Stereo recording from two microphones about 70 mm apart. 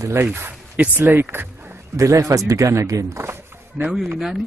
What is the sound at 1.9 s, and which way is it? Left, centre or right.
Speech, right.